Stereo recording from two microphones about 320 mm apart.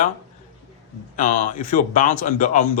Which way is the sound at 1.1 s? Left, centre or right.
Left.